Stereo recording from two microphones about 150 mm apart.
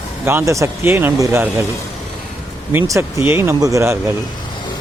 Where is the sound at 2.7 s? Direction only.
20° right (ahead or behind).